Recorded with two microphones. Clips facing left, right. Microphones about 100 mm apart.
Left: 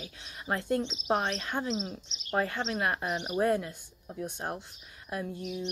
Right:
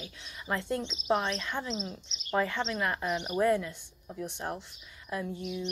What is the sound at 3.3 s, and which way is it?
Speech, 35° left (ahead or behind).